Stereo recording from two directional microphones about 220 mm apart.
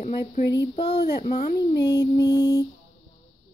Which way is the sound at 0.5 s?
25° left (ahead or behind).